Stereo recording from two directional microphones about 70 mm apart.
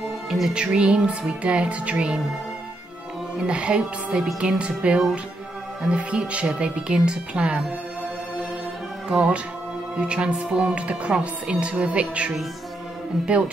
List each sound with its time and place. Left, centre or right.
0.3 s music: centre
0.6 s speech: centre
3.3 s speech: centre
9.1 s speech: centre